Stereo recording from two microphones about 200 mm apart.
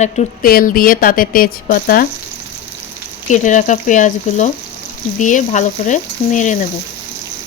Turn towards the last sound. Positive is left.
turn(degrees=40)  # may be behind; listen again after turning